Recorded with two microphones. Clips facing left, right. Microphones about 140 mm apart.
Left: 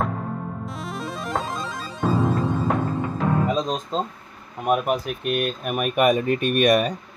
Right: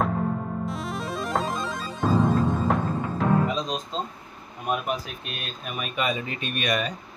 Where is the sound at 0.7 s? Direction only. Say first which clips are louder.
Right 1 dB; centre (ahead or behind).